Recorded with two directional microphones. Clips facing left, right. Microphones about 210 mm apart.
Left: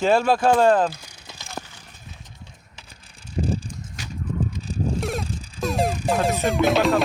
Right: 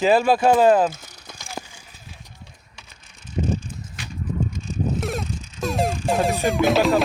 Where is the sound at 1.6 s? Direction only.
10° right (ahead or behind).